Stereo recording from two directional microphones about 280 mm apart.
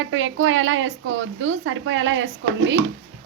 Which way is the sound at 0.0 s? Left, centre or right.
Right.